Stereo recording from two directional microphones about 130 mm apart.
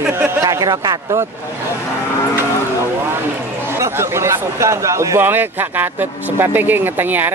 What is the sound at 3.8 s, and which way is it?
Speech, 20° right (ahead or behind).